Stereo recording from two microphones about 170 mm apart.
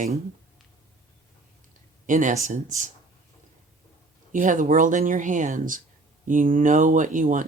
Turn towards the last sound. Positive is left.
turn(degrees=-50)  # may be behind; listen again after turning